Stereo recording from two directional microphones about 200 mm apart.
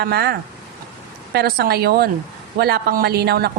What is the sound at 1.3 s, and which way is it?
A woman's voice, 50° right (ahead or behind).